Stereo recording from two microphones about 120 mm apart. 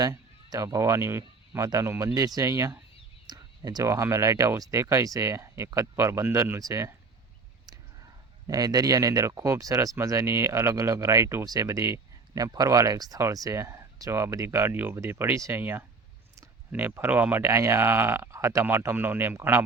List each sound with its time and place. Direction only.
0.0 s speech: 30° right (ahead or behind)